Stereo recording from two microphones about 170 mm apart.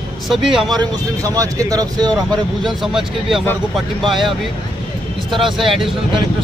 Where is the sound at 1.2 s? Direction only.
20° right (ahead or behind).